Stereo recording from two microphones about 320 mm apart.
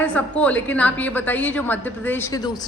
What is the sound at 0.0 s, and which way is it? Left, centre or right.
A woman's voice, centre.